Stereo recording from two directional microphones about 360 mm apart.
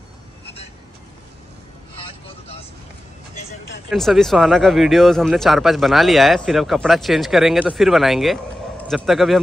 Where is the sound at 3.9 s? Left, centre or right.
Centre.